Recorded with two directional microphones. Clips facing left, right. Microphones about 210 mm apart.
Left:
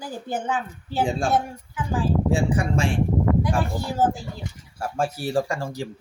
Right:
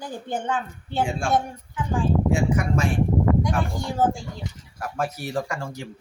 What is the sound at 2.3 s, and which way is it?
Speech, 30° left (ahead or behind).